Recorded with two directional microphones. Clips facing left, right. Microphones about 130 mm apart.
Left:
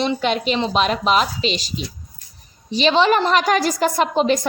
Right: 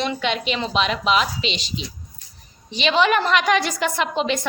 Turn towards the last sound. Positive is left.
turn(degrees=40)  # may be behind; listen again after turning